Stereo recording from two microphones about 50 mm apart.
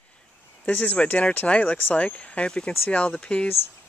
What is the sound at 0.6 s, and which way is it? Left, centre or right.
Speech, left.